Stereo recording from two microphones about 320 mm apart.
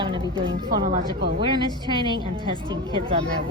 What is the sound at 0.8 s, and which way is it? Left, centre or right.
Speech, right.